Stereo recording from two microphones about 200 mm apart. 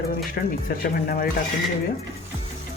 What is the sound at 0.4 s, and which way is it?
Speech, 45° left (ahead or behind).